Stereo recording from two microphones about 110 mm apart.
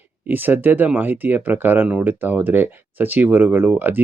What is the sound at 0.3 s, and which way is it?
Speech, 15° right (ahead or behind).